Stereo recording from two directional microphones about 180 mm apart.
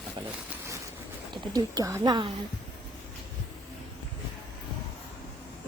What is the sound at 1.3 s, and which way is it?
Speech, 20° right (ahead or behind).